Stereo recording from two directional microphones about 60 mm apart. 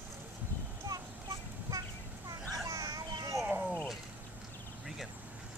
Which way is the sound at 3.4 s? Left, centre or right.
Right.